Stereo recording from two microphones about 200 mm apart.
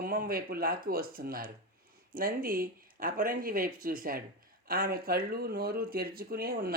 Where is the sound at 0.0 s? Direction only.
45° right (ahead or behind).